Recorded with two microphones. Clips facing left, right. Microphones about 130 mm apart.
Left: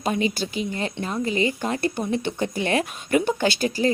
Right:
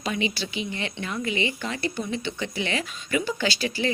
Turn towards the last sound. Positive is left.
turn(degrees=50)  # may be behind; listen again after turning